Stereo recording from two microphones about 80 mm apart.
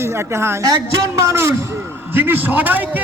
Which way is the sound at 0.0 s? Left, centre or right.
Right.